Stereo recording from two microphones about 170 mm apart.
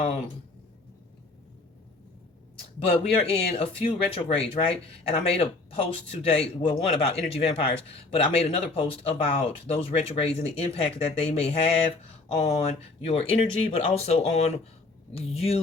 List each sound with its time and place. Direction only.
2.8 s speech: 35° left (ahead or behind)